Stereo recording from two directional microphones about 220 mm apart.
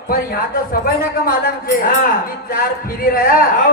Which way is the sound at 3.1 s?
40° left (ahead or behind).